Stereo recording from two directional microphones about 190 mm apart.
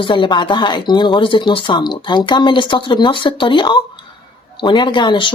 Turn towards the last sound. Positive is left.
turn(degrees=25)  # may be behind; listen again after turning